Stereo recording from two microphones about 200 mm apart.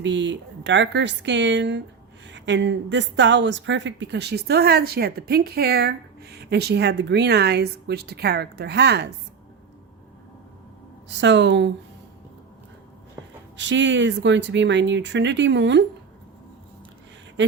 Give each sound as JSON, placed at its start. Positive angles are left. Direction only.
{"t": 0.0, "sound": "a woman's voice", "side_deg": -65}
{"t": 11.2, "sound": "a woman's voice", "side_deg": -65}
{"t": 13.6, "sound": "a woman's voice", "side_deg": -65}